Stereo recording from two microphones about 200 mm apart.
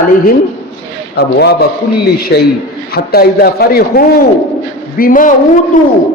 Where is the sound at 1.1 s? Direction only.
55° left (ahead or behind).